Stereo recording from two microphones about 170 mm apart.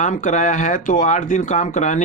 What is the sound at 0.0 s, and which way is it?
Speech, 45° left (ahead or behind).